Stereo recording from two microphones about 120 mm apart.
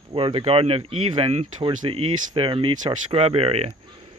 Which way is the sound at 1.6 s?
45° right (ahead or behind).